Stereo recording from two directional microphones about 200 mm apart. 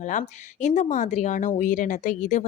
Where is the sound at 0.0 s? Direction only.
40° left (ahead or behind).